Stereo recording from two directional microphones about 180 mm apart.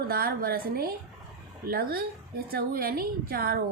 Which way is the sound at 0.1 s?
55° right (ahead or behind).